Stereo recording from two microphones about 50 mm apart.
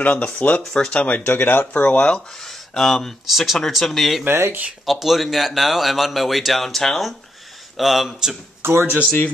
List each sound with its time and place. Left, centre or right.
0.0 s speech: left
0.6 s speech: centre
1.0 s speech: left
1.3 s speech: left
2.4 s speech: centre
3.3 s a man's voice: centre
8.6 s speech: right